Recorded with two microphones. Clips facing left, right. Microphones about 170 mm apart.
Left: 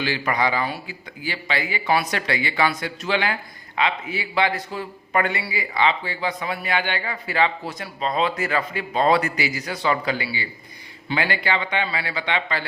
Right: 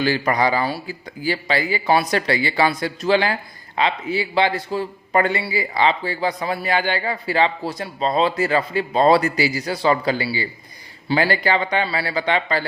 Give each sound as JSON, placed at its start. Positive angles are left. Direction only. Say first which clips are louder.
{"t": 0.0, "sound": "a man's voice", "louder": "right 4 dB", "side_deg": -40}